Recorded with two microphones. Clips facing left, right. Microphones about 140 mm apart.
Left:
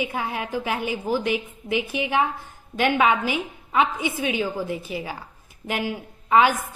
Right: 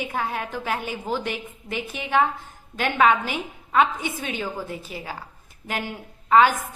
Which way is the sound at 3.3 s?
15° left (ahead or behind).